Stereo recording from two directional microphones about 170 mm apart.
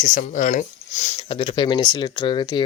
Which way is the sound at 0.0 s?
50° left (ahead or behind).